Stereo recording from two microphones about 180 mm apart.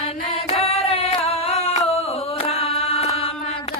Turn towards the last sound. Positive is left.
turn(degrees=35)  # may be behind; listen again after turning